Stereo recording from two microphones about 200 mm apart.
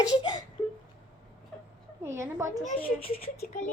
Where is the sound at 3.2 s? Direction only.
40° left (ahead or behind).